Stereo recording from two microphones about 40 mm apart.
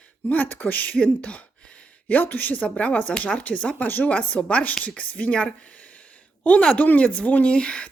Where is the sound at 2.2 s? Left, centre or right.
Left.